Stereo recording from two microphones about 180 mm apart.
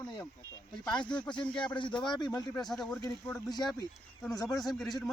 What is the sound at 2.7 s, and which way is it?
Speech, centre (ahead or behind).